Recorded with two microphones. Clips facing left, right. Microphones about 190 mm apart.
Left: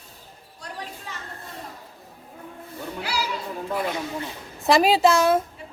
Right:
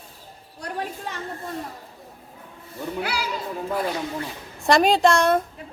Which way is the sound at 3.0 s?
55° right (ahead or behind).